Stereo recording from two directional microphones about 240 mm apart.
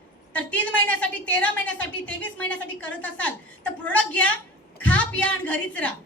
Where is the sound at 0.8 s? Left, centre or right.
Centre.